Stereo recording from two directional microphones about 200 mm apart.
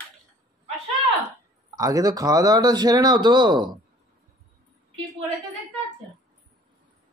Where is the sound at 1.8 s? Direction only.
20° right (ahead or behind).